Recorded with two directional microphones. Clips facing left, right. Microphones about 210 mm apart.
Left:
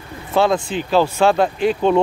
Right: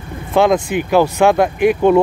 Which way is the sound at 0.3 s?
15° right (ahead or behind).